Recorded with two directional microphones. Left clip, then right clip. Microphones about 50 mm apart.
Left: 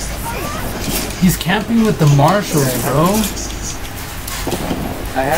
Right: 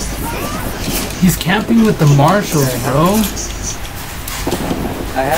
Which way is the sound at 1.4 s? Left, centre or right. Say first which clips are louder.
Right 3 dB; right.